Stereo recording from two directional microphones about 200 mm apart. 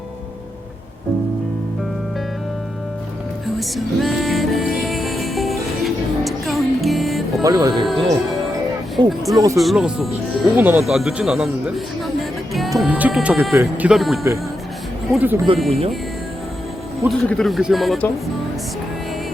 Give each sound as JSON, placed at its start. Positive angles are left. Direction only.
{"t": 3.4, "sound": "music", "side_deg": 0}
{"t": 7.4, "sound": "speech", "side_deg": -20}
{"t": 7.9, "sound": "speech", "side_deg": 0}
{"t": 12.8, "sound": "speech", "side_deg": -5}
{"t": 17.1, "sound": "speech", "side_deg": 0}